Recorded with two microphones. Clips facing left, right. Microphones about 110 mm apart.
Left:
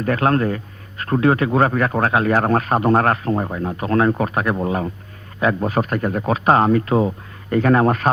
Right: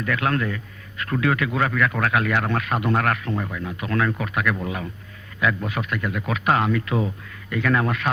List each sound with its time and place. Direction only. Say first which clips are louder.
0.0 s a man's voice: left 6 dB; 35° left (ahead or behind)